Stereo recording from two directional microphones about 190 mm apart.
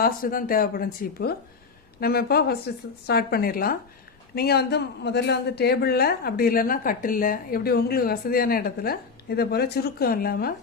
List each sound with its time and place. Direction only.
0.0 s a woman's voice: 50° left (ahead or behind)